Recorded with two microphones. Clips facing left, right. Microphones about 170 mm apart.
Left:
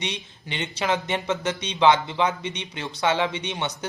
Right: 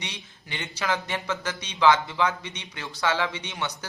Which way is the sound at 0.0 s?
20° left (ahead or behind).